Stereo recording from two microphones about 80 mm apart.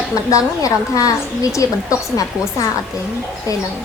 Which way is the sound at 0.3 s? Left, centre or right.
Left.